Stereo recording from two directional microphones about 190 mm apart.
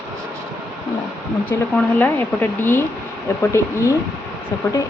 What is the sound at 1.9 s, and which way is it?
Speech, 10° left (ahead or behind).